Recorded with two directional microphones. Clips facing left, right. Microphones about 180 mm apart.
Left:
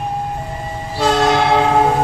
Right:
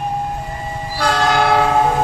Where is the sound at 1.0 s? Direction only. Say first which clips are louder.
Left 2 dB; 25° left (ahead or behind).